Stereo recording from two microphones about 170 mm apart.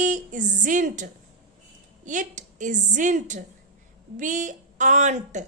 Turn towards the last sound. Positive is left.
turn(degrees=-45)  # may be behind; listen again after turning